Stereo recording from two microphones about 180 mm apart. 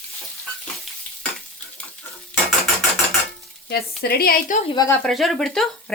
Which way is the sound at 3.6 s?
60° left (ahead or behind).